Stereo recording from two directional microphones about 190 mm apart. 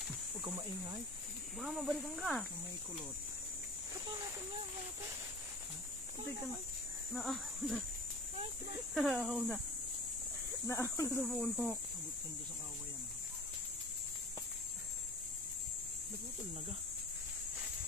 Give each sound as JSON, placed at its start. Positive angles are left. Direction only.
{"t": 0.4, "sound": "speech", "side_deg": -20}
{"t": 1.6, "sound": "speech", "side_deg": -5}
{"t": 7.2, "sound": "speech", "side_deg": 0}
{"t": 8.9, "sound": "speech", "side_deg": 0}
{"t": 10.7, "sound": "speech", "side_deg": 15}
{"t": 11.2, "sound": "speech", "side_deg": 0}